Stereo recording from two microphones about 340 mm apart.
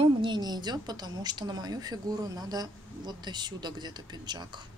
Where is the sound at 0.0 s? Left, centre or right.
Centre.